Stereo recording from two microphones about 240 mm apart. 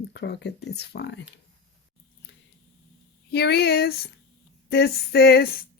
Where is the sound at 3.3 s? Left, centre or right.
Left.